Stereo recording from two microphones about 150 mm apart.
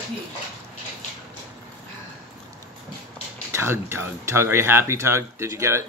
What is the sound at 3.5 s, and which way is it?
Speech, 15° right (ahead or behind).